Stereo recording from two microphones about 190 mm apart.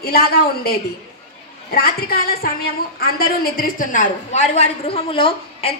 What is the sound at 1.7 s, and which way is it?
A man's voice, 50° left (ahead or behind).